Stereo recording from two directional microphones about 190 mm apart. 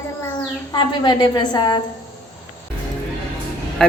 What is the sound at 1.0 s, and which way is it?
Speech, 25° left (ahead or behind).